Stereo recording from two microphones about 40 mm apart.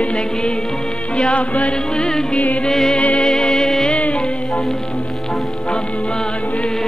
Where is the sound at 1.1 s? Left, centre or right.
Left.